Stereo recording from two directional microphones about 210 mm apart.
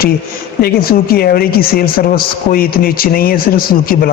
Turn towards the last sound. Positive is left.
turn(degrees=45)  # may be behind; listen again after turning